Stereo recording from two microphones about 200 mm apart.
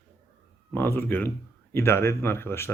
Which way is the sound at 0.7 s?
10° left (ahead or behind).